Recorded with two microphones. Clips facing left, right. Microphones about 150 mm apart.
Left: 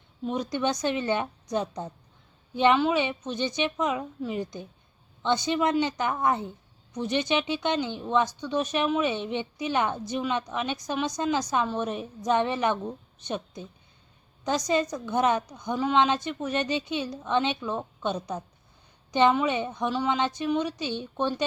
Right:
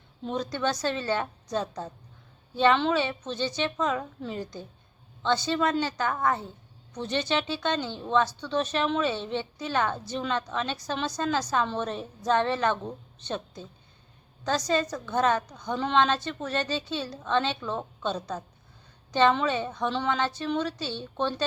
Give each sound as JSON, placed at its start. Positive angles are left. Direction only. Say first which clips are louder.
{"t": 0.3, "sound": "speech", "louder": "left 1 dB", "side_deg": 15}